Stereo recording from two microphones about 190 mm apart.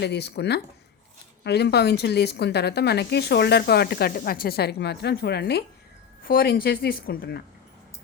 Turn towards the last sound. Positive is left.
turn(degrees=50)  # may be behind; listen again after turning